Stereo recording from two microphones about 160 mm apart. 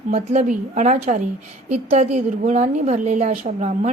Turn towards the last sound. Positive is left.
turn(degrees=-50)  # may be behind; listen again after turning